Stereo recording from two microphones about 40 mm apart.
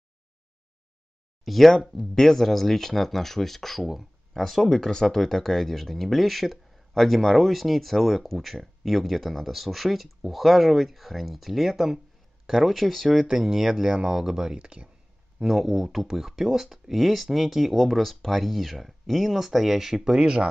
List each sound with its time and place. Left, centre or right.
1.4 s speech: centre
13.3 s speech: centre
14.6 s speech: right
15.3 s speech: centre